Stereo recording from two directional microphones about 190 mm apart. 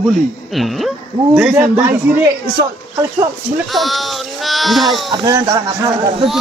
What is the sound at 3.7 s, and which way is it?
Speech, centre (ahead or behind).